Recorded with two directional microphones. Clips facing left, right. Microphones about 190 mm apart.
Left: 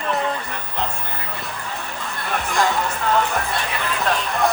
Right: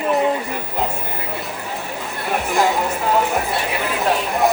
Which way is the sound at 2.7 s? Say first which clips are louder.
Right 2 dB; 15° right (ahead or behind).